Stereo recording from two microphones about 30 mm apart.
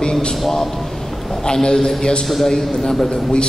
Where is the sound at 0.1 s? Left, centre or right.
Centre.